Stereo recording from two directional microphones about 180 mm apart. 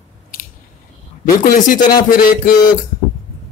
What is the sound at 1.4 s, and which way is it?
Speech, 50° left (ahead or behind).